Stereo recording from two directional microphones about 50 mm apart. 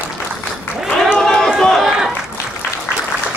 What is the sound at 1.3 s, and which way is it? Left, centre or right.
Run, centre.